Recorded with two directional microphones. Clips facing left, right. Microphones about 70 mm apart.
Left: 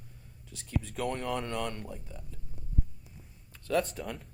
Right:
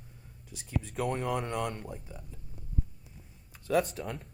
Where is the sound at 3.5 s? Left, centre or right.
Centre.